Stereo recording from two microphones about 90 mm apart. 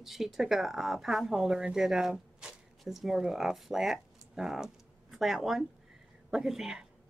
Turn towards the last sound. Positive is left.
turn(degrees=-5)  # may be behind; listen again after turning